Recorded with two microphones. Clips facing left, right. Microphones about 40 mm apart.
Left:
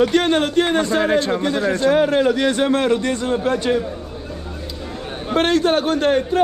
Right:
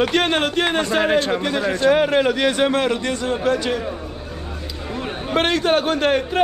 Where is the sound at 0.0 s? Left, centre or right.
Right.